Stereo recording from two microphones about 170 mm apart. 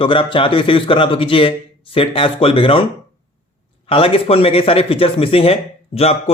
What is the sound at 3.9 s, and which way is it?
Speech, 35° left (ahead or behind).